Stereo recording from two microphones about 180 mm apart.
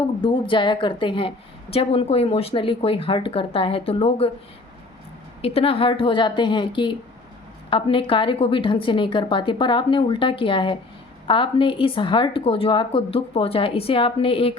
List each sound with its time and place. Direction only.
0.2 s a woman's voice: 25° left (ahead or behind)
5.4 s a woman's voice: 35° left (ahead or behind)